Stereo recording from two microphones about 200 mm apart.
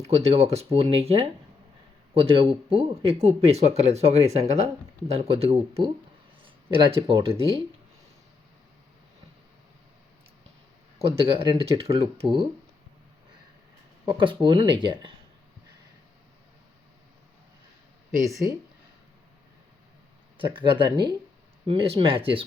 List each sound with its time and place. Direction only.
0.2 s speech: 30° right (ahead or behind)
11.0 s speech: 30° right (ahead or behind)
14.0 s speech: 25° right (ahead or behind)
20.4 s speech: 25° right (ahead or behind)